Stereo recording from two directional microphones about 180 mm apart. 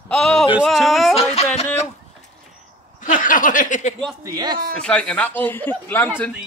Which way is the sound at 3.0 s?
45° left (ahead or behind).